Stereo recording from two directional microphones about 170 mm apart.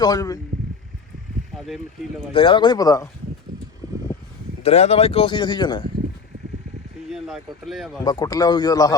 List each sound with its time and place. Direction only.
0.0 s a man's voice: 20° left (ahead or behind)
1.5 s speech: centre (ahead or behind)
2.3 s a man's voice: 30° left (ahead or behind)
4.6 s speech: 40° left (ahead or behind)
7.1 s speech: centre (ahead or behind)
8.0 s a man's voice: 20° left (ahead or behind)